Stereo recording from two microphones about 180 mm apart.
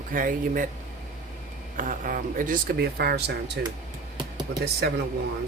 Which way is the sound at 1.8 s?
50° right (ahead or behind).